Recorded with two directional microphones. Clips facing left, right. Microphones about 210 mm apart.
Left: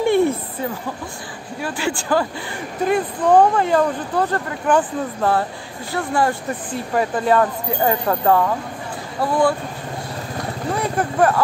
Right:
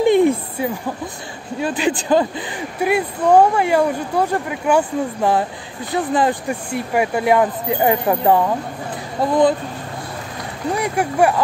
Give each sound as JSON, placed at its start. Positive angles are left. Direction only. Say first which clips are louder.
{"t": 0.0, "sound": "a sound", "louder": "right 3 dB", "side_deg": -15}
{"t": 1.6, "sound": "speech", "louder": "right 4 dB", "side_deg": -20}
{"t": 10.8, "sound": "speech", "louder": "right 1 dB", "side_deg": -15}